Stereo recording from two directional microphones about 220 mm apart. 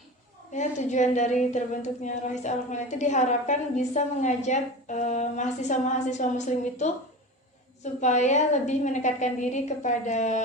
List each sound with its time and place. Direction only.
0.5 s a woman's voice: 35° left (ahead or behind)
8.0 s a woman's voice: 35° left (ahead or behind)